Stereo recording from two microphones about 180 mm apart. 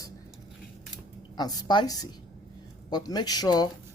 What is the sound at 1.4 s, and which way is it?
Speech, 20° left (ahead or behind).